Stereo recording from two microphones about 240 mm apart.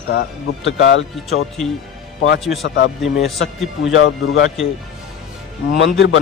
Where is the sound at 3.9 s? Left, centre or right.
Left.